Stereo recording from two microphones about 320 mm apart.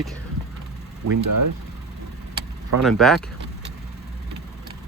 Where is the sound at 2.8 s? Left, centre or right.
Centre.